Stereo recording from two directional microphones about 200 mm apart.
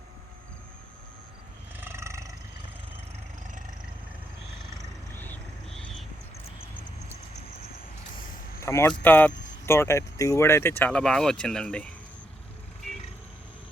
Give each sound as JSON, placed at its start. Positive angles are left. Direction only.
{"t": 1.8, "sound": "cat", "side_deg": -10}
{"t": 5.1, "sound": "a sound", "side_deg": 10}
{"t": 8.6, "sound": "speech", "side_deg": 10}